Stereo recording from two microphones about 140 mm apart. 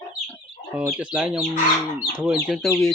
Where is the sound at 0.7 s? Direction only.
10° right (ahead or behind).